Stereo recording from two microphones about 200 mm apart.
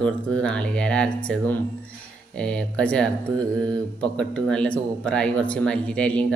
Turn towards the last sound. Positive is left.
turn(degrees=5)  # may be behind; listen again after turning